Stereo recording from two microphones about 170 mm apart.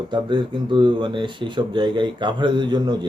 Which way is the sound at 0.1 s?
25° right (ahead or behind).